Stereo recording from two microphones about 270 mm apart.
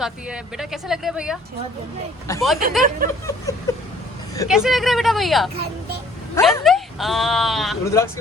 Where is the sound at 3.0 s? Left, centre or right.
Right.